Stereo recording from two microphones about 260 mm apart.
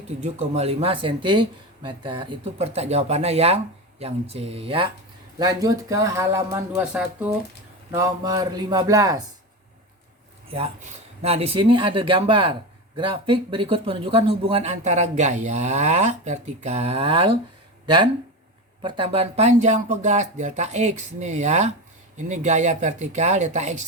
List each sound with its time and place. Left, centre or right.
0.2 s speech: right
11.2 s speech: right